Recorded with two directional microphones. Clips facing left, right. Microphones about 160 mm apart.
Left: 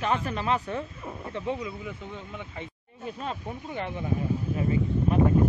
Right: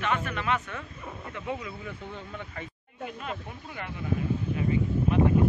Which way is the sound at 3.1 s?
30° left (ahead or behind).